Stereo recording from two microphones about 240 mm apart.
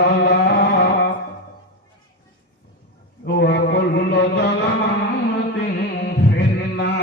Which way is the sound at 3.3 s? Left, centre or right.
Left.